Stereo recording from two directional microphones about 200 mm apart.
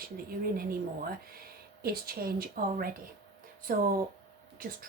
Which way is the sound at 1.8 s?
50° right (ahead or behind).